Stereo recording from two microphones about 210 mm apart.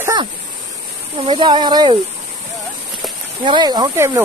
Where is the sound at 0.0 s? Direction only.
15° right (ahead or behind).